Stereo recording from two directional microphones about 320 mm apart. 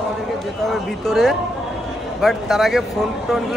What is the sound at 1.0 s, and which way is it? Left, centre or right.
Speech, centre.